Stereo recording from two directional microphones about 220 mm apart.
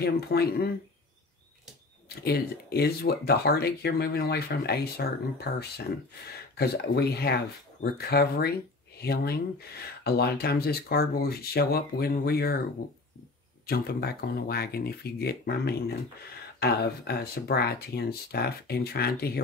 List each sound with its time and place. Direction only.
0.0 s speech: 45° left (ahead or behind)
2.0 s speech: 45° left (ahead or behind)
13.7 s speech: 45° left (ahead or behind)